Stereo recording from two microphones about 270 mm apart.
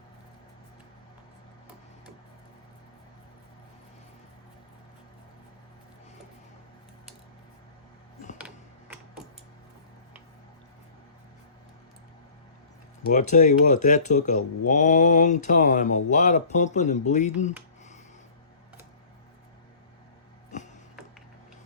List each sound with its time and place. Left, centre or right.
8.4 s tick-tock: centre
13.1 s speech: left